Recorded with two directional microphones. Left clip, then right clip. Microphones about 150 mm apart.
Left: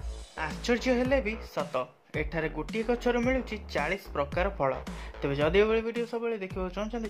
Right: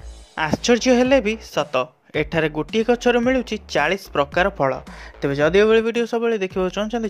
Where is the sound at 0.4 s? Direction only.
45° right (ahead or behind).